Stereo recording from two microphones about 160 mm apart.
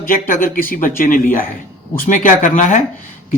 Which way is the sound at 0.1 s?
60° left (ahead or behind).